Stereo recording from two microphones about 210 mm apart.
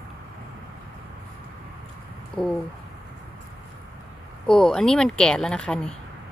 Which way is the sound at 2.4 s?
5° left (ahead or behind).